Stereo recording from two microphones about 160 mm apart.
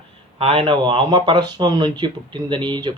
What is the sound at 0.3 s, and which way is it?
Speech, 35° right (ahead or behind).